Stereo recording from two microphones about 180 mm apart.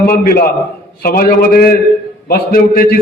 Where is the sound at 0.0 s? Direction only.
55° left (ahead or behind).